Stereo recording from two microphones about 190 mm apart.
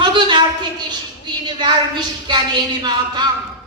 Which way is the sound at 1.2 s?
20° right (ahead or behind).